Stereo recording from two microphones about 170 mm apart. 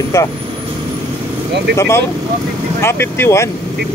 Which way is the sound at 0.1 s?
15° left (ahead or behind).